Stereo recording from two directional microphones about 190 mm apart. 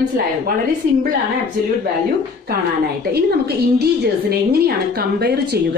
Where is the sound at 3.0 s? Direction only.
55° right (ahead or behind).